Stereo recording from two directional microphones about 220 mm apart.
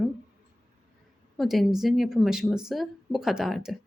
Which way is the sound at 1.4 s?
Centre (ahead or behind).